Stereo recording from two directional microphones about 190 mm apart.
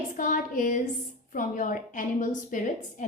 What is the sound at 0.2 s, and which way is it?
A woman's voice, 45° left (ahead or behind).